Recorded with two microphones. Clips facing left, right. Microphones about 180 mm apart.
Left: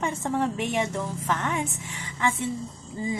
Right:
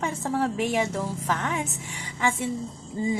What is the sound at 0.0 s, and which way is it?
A woman's voice, centre (ahead or behind).